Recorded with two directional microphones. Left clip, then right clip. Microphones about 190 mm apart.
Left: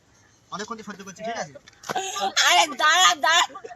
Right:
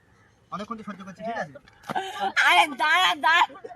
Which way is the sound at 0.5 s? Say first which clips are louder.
Left 1 dB; centre (ahead or behind).